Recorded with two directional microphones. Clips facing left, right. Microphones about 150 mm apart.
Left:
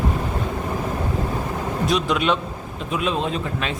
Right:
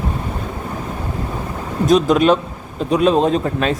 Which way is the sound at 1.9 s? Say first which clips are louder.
Right 9 dB; 45° right (ahead or behind).